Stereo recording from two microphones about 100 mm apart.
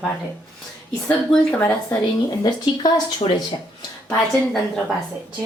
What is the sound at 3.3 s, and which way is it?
Speech, 60° left (ahead or behind).